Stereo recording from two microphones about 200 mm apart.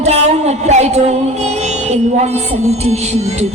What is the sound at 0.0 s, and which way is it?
Music, 35° right (ahead or behind).